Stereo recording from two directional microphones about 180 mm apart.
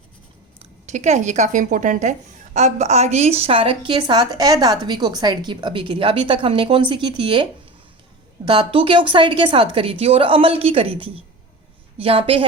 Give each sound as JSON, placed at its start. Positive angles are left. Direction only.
{"t": 0.6, "sound": "speech", "side_deg": -40}
{"t": 8.4, "sound": "a woman's voice", "side_deg": -30}